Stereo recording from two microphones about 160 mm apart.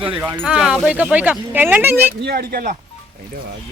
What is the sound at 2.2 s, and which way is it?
Speech, 75° right (ahead or behind).